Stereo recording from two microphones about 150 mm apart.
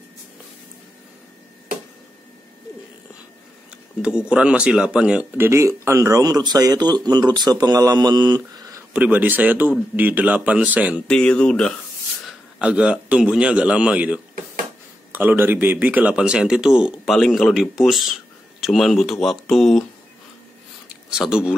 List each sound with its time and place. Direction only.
4.0 s speech: 5° right (ahead or behind)
5.5 s speech: 20° right (ahead or behind)
8.9 s speech: 10° right (ahead or behind)
11.1 s speech: 5° left (ahead or behind)
12.5 s speech: 10° right (ahead or behind)
21.1 s speech: 5° right (ahead or behind)